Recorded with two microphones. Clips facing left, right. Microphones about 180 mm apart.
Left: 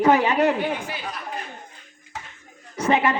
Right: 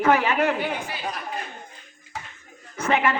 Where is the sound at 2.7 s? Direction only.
15° left (ahead or behind).